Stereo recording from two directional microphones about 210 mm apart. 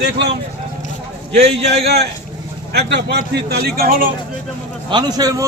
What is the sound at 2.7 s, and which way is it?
Speech, 55° right (ahead or behind).